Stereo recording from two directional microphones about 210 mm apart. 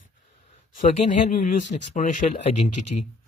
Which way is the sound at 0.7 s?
35° left (ahead or behind).